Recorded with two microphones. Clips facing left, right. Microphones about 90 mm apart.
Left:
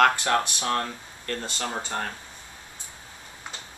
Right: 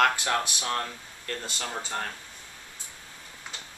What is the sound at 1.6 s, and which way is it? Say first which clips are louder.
Speech: left 3 dB; 20° left (ahead or behind).